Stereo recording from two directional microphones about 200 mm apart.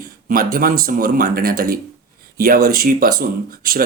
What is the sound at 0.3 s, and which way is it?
Speech, 45° right (ahead or behind).